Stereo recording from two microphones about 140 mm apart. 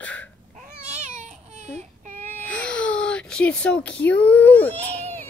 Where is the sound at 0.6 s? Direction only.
60° right (ahead or behind).